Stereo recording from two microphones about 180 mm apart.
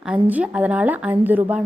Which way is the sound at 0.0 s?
10° right (ahead or behind).